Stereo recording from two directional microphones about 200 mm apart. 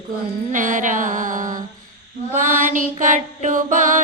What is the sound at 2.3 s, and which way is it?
Music, 40° right (ahead or behind).